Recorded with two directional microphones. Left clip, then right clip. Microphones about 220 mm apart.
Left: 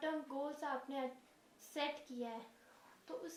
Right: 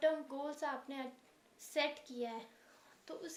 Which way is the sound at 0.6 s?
45° right (ahead or behind).